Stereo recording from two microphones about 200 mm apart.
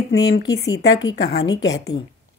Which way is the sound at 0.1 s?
60° left (ahead or behind).